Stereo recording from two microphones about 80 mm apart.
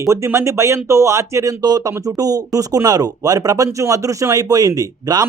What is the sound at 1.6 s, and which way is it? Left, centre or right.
Speech, right.